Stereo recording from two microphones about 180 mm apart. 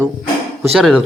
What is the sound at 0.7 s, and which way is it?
Speech, centre (ahead or behind).